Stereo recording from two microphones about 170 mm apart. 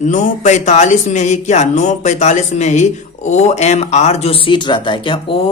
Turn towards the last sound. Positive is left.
turn(degrees=30)  # may be behind; listen again after turning